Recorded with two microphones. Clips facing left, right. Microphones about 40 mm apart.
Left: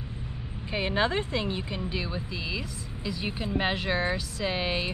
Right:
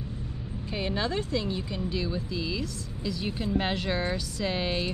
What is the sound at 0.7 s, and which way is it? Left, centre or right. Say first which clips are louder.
Speech: left 3 dB; left.